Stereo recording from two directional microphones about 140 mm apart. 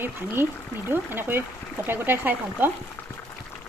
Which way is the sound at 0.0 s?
15° right (ahead or behind).